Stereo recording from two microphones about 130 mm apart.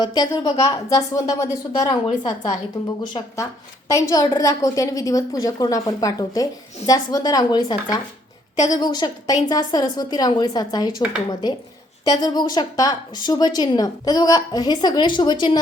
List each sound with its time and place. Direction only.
0.0 s a woman's voice: 30° left (ahead or behind)
12.0 s a woman's voice: 30° left (ahead or behind)